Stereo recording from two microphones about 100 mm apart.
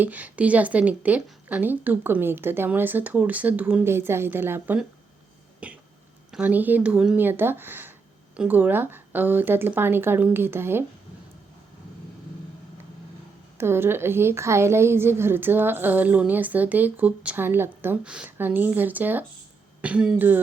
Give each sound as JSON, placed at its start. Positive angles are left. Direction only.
{"t": 0.0, "sound": "a woman's voice", "side_deg": -15}
{"t": 3.8, "sound": "a woman's voice", "side_deg": -25}
{"t": 5.6, "sound": "throat clearing", "side_deg": -15}
{"t": 6.4, "sound": "a woman's voice", "side_deg": -15}
{"t": 7.2, "sound": "a woman's voice", "side_deg": -20}
{"t": 13.6, "sound": "a woman's voice", "side_deg": -25}
{"t": 18.0, "sound": "a woman's voice", "side_deg": -10}